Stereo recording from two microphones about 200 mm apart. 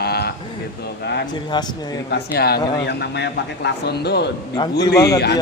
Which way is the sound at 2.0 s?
55° left (ahead or behind).